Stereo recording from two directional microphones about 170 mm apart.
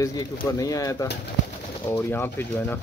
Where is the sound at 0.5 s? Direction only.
20° left (ahead or behind).